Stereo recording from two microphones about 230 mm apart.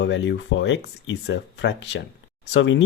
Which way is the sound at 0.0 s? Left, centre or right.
Left.